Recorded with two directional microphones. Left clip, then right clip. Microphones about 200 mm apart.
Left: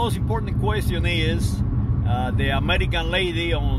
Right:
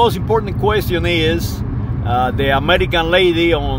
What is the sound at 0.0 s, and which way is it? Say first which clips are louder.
Speech: right 12 dB; 50° right (ahead or behind).